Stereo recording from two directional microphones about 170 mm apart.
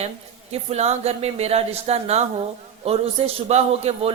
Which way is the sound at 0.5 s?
40° right (ahead or behind).